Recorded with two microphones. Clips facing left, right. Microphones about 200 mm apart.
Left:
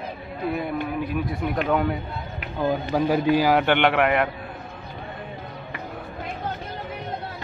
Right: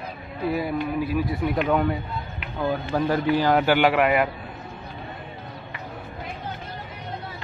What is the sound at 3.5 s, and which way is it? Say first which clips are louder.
Speech: even; 5° right (ahead or behind).